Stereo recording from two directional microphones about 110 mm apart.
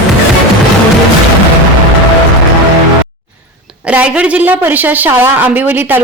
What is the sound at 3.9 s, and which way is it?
A woman's voice, 10° right (ahead or behind).